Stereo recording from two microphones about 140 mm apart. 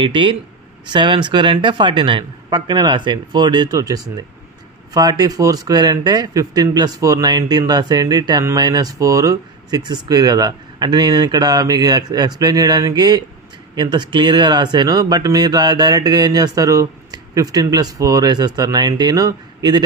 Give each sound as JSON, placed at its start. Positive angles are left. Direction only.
{"t": 0.0, "sound": "speech", "side_deg": -35}